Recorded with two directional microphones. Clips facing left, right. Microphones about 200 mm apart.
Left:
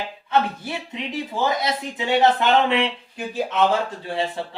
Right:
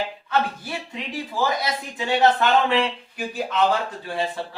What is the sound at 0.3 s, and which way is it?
Speech, 20° left (ahead or behind).